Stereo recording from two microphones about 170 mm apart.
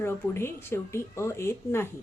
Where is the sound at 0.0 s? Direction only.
15° left (ahead or behind).